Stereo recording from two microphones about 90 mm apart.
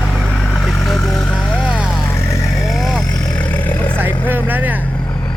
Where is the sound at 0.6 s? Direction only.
Centre (ahead or behind).